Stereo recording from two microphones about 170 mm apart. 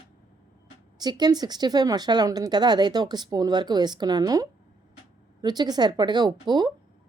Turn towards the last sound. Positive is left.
turn(degrees=-25)  # may be behind; listen again after turning